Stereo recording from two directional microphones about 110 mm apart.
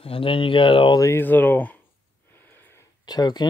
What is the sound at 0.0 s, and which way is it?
Speech, 55° left (ahead or behind).